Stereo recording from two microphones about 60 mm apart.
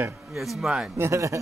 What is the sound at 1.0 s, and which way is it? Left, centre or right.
Speech, right.